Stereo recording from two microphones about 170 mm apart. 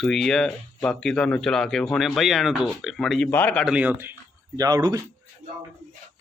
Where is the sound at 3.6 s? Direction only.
5° right (ahead or behind).